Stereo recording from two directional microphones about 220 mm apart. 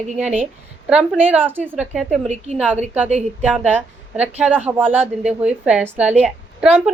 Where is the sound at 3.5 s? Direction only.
5° right (ahead or behind).